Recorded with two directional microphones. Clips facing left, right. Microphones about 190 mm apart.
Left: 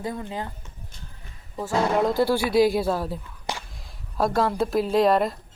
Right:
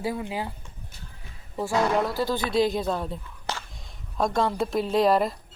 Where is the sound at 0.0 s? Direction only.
5° right (ahead or behind).